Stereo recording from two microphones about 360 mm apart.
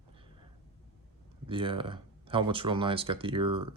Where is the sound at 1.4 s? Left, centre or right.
Centre.